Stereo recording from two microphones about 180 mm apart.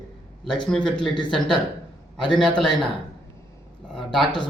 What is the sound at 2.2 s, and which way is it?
Speech, centre (ahead or behind).